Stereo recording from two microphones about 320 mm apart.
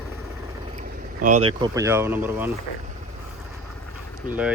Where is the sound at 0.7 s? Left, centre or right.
Right.